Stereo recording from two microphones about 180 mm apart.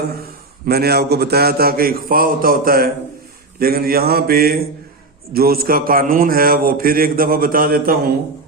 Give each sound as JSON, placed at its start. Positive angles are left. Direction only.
{"t": 0.2, "sound": "a man's voice", "side_deg": -60}